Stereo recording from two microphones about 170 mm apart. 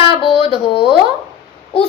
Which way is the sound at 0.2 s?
30° left (ahead or behind).